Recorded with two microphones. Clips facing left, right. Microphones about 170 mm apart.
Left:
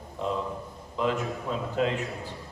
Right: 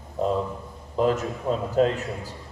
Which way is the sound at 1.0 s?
40° right (ahead or behind).